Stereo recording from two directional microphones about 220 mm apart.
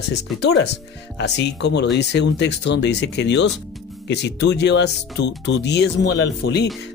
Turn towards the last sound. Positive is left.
turn(degrees=50)  # may be behind; listen again after turning